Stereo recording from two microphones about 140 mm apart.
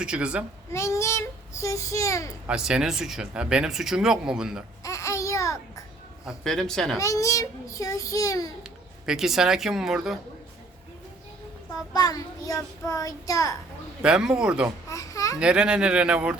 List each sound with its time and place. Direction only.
0.0 s speech: 5° right (ahead or behind)
0.7 s a child's voice: 20° left (ahead or behind)
2.5 s speech: 5° right (ahead or behind)
4.8 s babbling: 20° left (ahead or behind)
6.2 s speech: centre (ahead or behind)
7.0 s a child's voice: 25° left (ahead or behind)
8.6 s speech: 5° right (ahead or behind)
11.9 s a child's voice: 25° left (ahead or behind)
14.0 s speech: 5° right (ahead or behind)
14.8 s babbling: 25° left (ahead or behind)
15.4 s speech: 5° right (ahead or behind)